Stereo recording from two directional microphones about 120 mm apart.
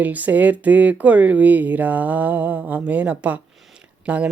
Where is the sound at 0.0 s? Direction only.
15° right (ahead or behind).